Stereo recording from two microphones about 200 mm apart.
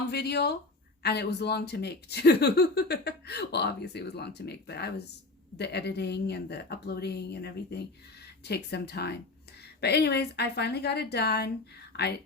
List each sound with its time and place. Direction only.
0.1 s speech: 55° left (ahead or behind)